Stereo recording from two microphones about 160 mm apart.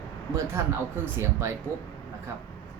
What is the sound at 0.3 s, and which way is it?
A man's voice, 15° right (ahead or behind).